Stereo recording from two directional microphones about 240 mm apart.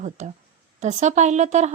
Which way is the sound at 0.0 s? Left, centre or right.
Right.